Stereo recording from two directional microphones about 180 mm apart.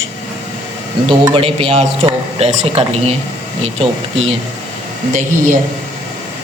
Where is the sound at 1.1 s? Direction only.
30° right (ahead or behind).